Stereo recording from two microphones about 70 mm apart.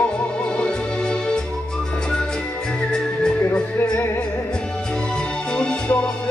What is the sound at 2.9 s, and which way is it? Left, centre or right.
Music, centre.